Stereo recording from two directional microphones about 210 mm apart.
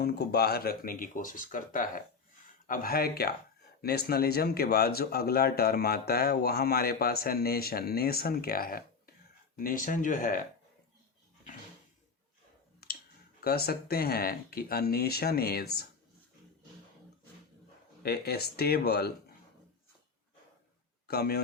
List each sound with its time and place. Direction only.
0.0 s speech: 50° left (ahead or behind)
12.8 s clicking: 45° left (ahead or behind)
13.4 s speech: 45° left (ahead or behind)
18.0 s speech: 50° left (ahead or behind)
21.1 s speech: 50° left (ahead or behind)